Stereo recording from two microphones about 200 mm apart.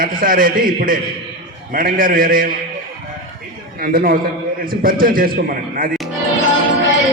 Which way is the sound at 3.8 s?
45° right (ahead or behind).